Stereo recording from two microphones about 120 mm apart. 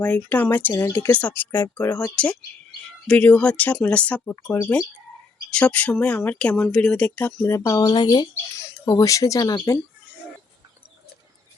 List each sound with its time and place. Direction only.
0.0 s speech: 15° left (ahead or behind)
0.7 s speech: 30° left (ahead or behind)
0.9 s speech: 15° left (ahead or behind)
3.1 s speech: 10° left (ahead or behind)
4.4 s speech: 25° left (ahead or behind)
5.5 s speech: 10° left (ahead or behind); by 9.8 s 25° left (ahead or behind)